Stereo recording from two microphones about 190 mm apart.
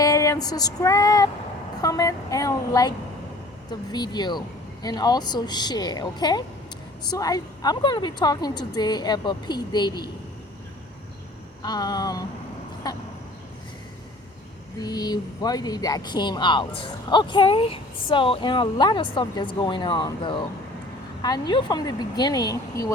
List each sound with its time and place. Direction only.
0.0 s female singing: 15° left (ahead or behind)
1.8 s speech: 20° left (ahead or behind)
11.6 s speech: 20° left (ahead or behind)
14.8 s speech: 20° left (ahead or behind)